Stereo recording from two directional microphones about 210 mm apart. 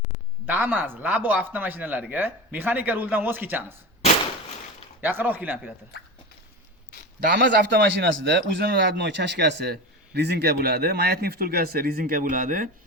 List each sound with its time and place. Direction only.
0.4 s speech: 5° right (ahead or behind)
4.9 s speech: 10° right (ahead or behind)
7.2 s a man's voice: 50° right (ahead or behind)